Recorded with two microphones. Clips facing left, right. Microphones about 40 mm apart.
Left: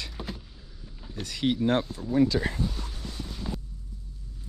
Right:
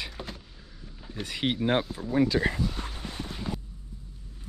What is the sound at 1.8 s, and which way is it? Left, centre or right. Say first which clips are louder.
Speech: left 1 dB; centre.